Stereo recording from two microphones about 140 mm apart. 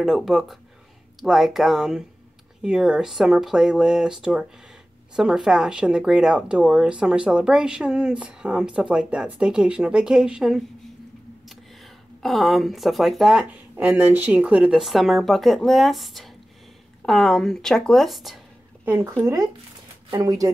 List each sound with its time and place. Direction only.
0.0 s speech: centre (ahead or behind)
18.9 s speech: 15° right (ahead or behind)